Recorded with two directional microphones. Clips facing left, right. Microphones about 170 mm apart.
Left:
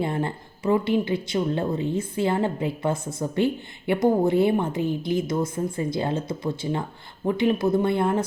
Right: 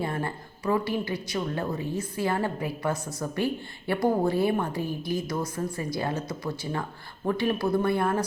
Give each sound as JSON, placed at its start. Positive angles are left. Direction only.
{"t": 0.0, "sound": "a woman's voice", "side_deg": 20}